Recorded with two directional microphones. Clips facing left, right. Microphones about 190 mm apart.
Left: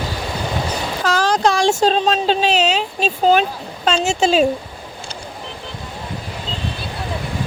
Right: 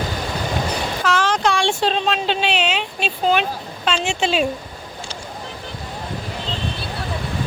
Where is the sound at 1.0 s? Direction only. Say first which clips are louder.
Left 3 dB; 35° left (ahead or behind).